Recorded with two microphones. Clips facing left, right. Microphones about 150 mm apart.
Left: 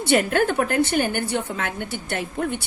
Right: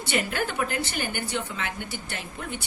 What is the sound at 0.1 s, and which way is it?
A woman's voice, 50° left (ahead or behind).